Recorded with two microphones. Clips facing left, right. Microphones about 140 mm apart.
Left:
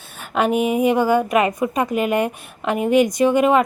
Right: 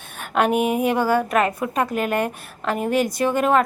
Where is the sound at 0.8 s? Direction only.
10° left (ahead or behind).